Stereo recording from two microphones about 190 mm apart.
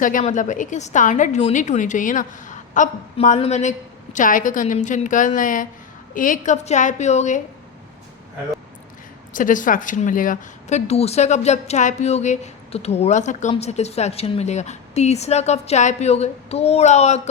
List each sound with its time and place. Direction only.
0.0 s speech: 40° left (ahead or behind)
9.3 s speech: 45° left (ahead or behind)